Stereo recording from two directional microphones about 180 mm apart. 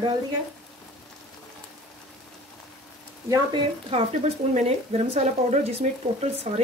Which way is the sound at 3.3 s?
30° right (ahead or behind).